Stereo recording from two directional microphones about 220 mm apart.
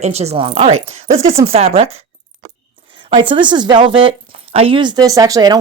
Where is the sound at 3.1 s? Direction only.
20° right (ahead or behind).